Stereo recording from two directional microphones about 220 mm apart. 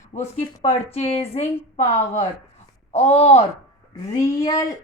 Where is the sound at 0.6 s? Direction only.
30° left (ahead or behind).